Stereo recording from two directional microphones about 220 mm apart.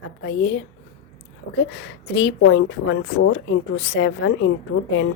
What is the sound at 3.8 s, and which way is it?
Speech, 60° left (ahead or behind).